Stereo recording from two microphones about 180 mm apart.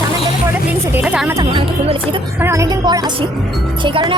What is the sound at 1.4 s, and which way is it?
Music, 30° right (ahead or behind).